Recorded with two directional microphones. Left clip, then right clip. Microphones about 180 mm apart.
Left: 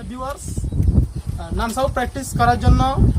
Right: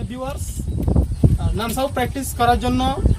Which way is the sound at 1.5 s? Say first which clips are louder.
Left 3 dB; 5° right (ahead or behind).